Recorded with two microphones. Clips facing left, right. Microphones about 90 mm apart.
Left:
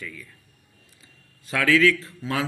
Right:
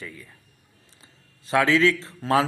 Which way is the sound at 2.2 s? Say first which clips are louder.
Right 6 dB; 35° right (ahead or behind).